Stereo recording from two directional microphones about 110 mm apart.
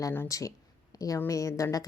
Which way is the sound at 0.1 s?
20° left (ahead or behind).